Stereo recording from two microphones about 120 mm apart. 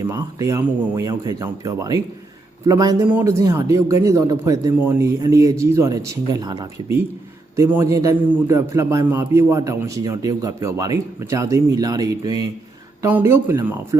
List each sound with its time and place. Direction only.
0.0 s a man's voice: 25° right (ahead or behind)
13.1 s a man's voice: 15° right (ahead or behind)